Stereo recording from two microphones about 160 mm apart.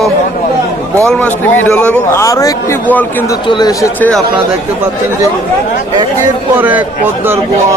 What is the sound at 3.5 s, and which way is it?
Speech, 25° left (ahead or behind).